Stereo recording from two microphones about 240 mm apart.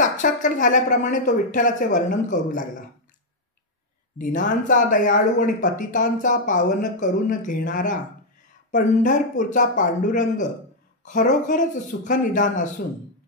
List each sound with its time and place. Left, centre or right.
0.0 s speech: left
4.2 s speech: left